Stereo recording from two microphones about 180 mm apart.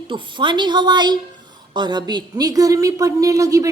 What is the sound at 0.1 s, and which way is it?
A woman's voice, 25° right (ahead or behind).